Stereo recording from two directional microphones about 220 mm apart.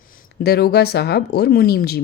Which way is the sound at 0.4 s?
45° left (ahead or behind).